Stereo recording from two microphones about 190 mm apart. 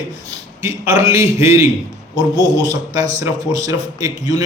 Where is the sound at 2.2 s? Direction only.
70° left (ahead or behind).